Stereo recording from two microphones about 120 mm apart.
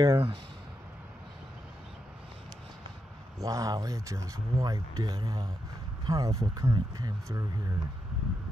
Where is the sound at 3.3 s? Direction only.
30° right (ahead or behind).